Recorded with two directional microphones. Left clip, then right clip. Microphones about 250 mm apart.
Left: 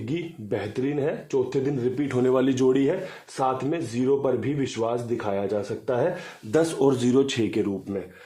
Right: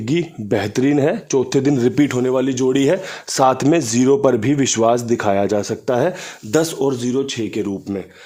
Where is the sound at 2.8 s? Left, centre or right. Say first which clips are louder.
Right 8 dB; right.